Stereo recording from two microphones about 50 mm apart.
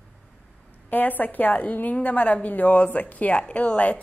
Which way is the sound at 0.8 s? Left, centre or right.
Left.